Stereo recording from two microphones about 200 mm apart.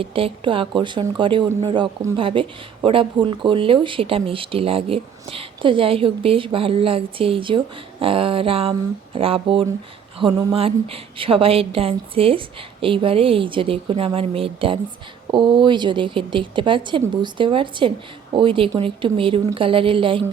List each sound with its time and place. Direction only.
0.0 s speech: 25° right (ahead or behind)